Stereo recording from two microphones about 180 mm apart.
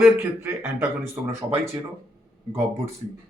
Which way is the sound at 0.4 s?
15° right (ahead or behind).